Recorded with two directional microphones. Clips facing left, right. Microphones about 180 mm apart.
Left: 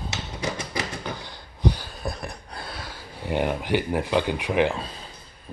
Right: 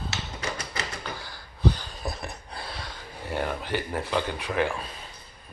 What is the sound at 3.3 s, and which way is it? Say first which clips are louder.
Speech: left 5 dB; 15° left (ahead or behind).